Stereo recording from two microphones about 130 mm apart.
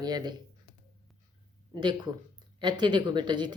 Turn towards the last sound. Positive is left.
turn(degrees=-35)  # may be behind; listen again after turning